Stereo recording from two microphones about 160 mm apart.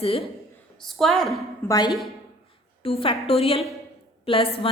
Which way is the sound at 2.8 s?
35° left (ahead or behind).